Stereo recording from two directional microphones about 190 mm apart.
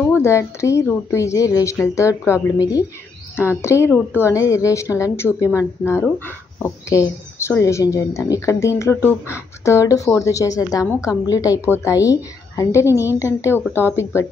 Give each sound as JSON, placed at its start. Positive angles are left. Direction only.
{"t": 0.0, "sound": "a woman's voice", "side_deg": 15}